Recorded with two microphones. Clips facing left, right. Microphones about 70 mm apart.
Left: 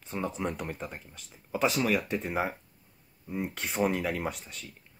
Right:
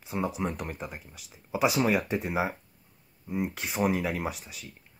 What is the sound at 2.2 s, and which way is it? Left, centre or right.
Speech, centre.